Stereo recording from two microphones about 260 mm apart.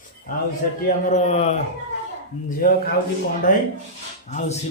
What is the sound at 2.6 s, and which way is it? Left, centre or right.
Speech, left.